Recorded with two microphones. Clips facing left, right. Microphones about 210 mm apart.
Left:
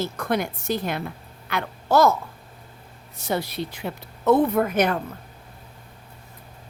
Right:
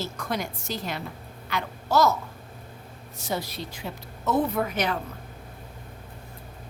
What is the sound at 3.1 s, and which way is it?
A woman's voice, 60° left (ahead or behind).